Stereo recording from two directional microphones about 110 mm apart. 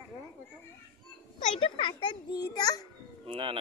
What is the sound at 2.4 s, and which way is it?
Speech, 35° left (ahead or behind).